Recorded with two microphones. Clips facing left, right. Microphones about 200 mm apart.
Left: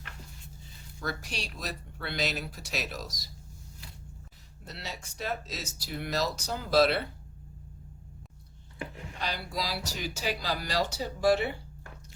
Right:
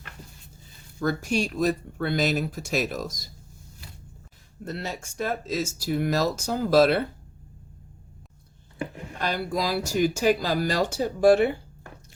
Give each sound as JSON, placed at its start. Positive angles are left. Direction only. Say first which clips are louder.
{"t": 0.9, "sound": "speech", "louder": "right 12 dB", "side_deg": -50}
{"t": 4.6, "sound": "speech", "louder": "right 9 dB", "side_deg": -50}
{"t": 9.1, "sound": "speech", "louder": "right 8 dB", "side_deg": -50}